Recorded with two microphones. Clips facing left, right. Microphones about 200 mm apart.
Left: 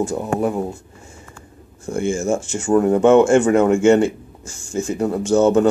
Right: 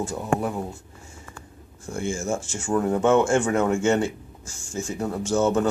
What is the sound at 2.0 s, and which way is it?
Speech, 60° left (ahead or behind).